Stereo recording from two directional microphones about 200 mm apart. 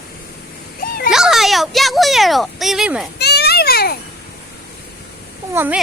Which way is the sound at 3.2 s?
55° left (ahead or behind).